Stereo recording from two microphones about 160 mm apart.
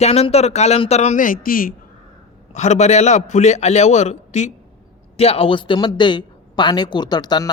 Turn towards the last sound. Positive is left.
turn(degrees=25)  # may be behind; listen again after turning